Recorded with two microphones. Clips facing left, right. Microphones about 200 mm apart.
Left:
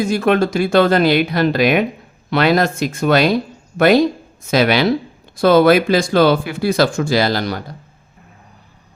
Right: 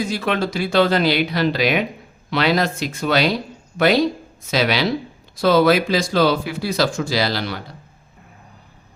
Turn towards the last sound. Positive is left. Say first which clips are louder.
# left 5 dB
turn(degrees=45)  # may be behind; listen again after turning